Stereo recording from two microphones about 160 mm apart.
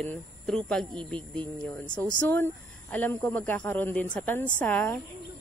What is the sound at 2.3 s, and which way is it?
Speech, 10° left (ahead or behind).